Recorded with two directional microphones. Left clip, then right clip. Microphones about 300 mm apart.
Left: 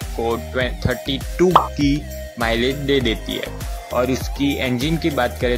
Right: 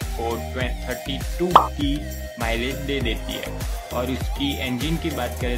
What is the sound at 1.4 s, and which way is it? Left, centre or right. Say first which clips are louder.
Speech: left 1 dB; centre.